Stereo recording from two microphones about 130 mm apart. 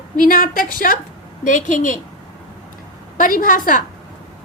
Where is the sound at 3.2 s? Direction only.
90° left.